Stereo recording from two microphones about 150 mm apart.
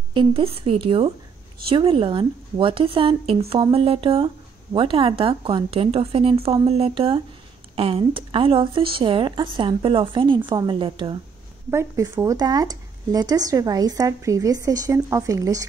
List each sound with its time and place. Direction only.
0.1 s a woman's voice: 35° right (ahead or behind)
11.7 s speech: 15° right (ahead or behind)